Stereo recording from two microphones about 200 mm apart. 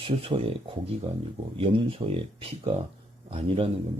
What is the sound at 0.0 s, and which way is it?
Speech, 25° right (ahead or behind).